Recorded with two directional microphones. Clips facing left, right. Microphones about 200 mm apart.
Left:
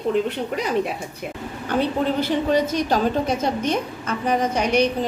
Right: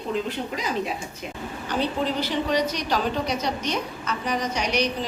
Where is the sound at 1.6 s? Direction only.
55° left (ahead or behind).